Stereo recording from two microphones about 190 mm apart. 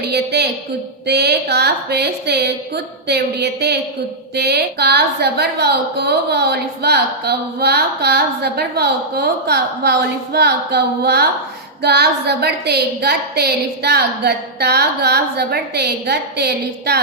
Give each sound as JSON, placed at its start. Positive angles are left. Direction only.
{"t": 0.1, "sound": "a woman's voice", "side_deg": -60}